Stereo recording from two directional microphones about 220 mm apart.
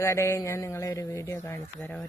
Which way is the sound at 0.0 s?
10° left (ahead or behind).